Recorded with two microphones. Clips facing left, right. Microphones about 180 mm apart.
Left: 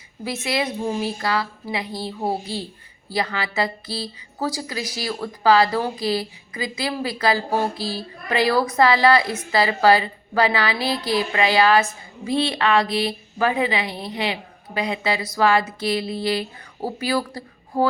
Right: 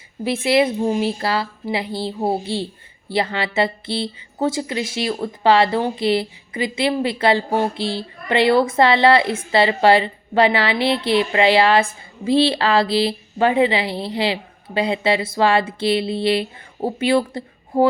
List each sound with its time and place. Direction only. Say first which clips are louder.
0.3 s a woman's voice: right 8 dB; 30° right (ahead or behind)